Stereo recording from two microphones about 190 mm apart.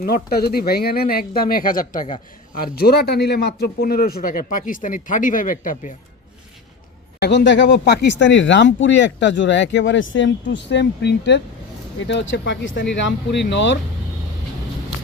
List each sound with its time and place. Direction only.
0.0 s speech: 55° left (ahead or behind)
2.7 s speech: 55° left (ahead or behind)
7.2 s speech: 65° left (ahead or behind)